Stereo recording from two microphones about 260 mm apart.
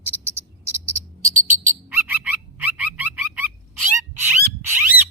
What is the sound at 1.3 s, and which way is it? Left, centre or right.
Bird, right.